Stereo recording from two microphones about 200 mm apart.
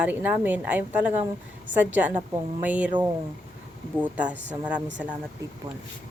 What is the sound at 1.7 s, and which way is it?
Speech, 65° right (ahead or behind).